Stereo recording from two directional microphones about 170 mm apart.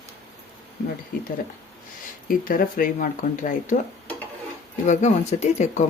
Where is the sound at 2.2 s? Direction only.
55° left (ahead or behind).